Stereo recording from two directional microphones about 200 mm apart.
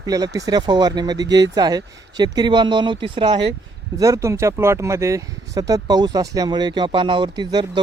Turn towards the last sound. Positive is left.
turn(degrees=-20)  # may be behind; listen again after turning